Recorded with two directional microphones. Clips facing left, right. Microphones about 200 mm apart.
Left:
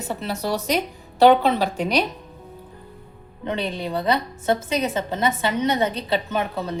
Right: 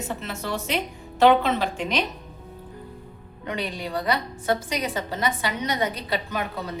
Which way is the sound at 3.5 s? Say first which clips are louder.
Left 4 dB; 25° left (ahead or behind).